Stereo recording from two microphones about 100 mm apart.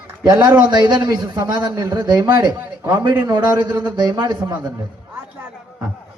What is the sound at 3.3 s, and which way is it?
A man's voice, 45° right (ahead or behind).